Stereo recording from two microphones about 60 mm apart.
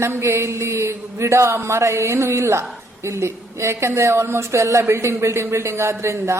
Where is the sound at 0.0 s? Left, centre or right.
Right.